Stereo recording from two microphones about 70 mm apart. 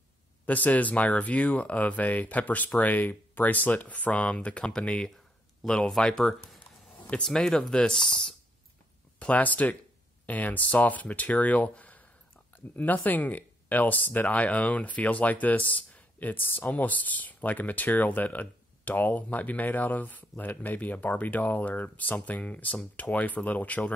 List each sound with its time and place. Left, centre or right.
0.5 s speech: left
9.2 s speech: left